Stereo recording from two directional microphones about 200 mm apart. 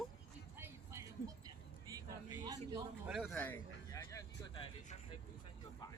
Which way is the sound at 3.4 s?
10° left (ahead or behind).